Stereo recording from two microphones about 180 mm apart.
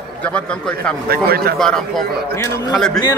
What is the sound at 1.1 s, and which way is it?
Speech, 55° right (ahead or behind).